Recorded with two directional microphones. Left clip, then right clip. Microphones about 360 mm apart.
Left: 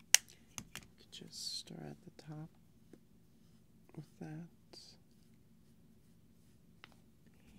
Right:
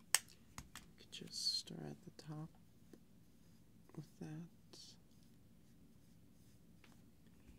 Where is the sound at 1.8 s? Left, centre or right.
Centre.